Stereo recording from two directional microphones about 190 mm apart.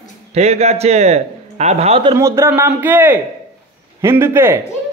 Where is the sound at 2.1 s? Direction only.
15° right (ahead or behind).